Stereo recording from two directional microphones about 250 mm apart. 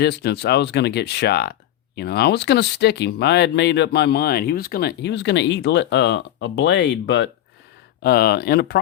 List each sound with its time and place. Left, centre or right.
0.0 s speech: left